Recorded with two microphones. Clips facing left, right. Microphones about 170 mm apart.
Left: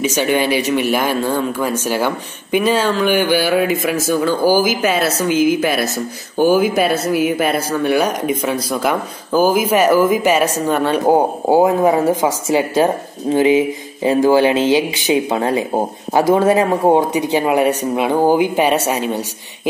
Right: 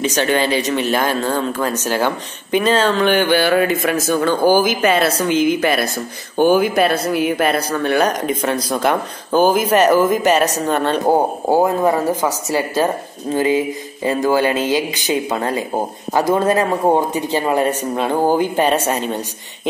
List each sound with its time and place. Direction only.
0.0 s speech: 10° left (ahead or behind)